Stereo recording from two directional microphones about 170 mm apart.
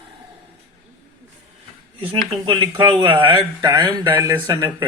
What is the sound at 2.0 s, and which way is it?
Speech, 30° right (ahead or behind).